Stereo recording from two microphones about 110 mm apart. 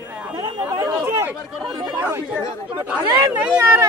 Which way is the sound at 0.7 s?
35° right (ahead or behind).